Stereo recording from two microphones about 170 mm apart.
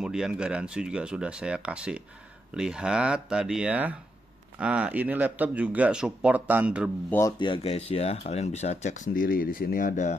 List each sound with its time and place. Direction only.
0.0 s speech: 5° right (ahead or behind)
7.1 s speech: 15° left (ahead or behind)
7.3 s speech: 30° left (ahead or behind); by 10.1 s 50° left (ahead or behind)